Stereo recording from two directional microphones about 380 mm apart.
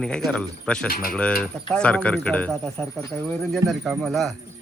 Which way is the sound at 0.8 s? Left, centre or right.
Left.